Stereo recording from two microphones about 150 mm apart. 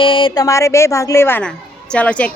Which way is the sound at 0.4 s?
20° left (ahead or behind).